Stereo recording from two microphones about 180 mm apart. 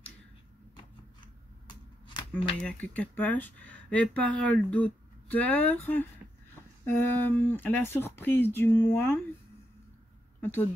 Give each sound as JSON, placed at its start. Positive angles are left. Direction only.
{"t": 1.2, "sound": "scissors", "side_deg": 25}
{"t": 2.6, "sound": "speech", "side_deg": 10}
{"t": 10.4, "sound": "speech", "side_deg": 10}